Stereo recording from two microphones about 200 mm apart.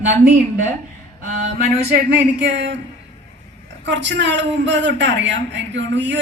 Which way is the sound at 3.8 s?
60° right (ahead or behind).